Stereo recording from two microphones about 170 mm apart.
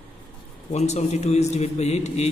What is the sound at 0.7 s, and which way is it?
A man's voice, 40° left (ahead or behind).